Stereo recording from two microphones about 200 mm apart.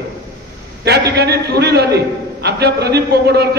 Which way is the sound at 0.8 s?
55° right (ahead or behind).